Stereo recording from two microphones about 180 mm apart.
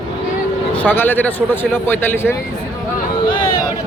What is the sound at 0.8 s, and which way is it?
Speech, 10° left (ahead or behind).